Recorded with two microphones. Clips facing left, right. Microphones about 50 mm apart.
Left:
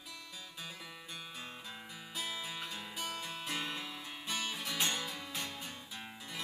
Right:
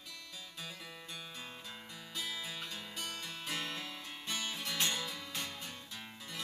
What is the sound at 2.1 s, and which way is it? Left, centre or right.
Music, centre.